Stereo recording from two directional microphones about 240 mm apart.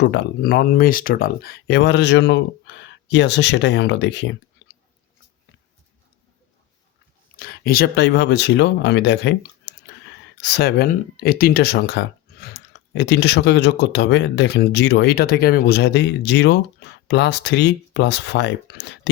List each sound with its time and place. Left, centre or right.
0.0 s speech: left
7.3 s speech: left